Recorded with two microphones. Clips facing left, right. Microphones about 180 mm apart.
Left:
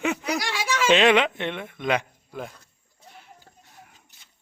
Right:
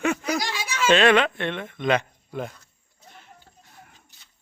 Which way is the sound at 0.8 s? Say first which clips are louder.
Right 1 dB; 15° left (ahead or behind).